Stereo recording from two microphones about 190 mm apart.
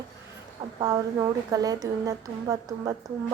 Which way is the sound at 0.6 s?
20° right (ahead or behind).